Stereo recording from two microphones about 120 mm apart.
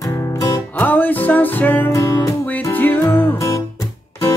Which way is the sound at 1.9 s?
25° left (ahead or behind).